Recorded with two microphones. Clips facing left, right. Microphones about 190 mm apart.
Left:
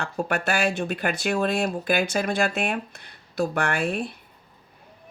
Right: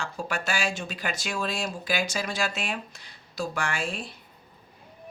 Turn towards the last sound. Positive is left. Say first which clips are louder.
# left 6 dB
turn(degrees=60)  # may be behind; listen again after turning